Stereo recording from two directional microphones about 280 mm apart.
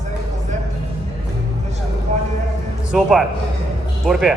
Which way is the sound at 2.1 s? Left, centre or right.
Right.